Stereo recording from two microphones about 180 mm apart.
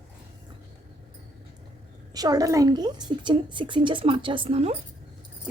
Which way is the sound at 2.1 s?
20° right (ahead or behind).